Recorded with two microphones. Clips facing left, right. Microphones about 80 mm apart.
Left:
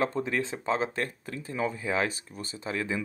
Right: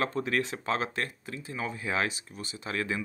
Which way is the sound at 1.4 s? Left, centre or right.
Left.